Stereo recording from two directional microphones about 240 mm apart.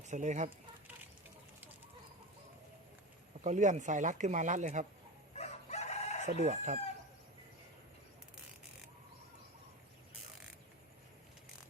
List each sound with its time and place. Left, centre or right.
0.1 s speech: right
3.4 s speech: right
5.3 s crowing: left
6.4 s chicken: right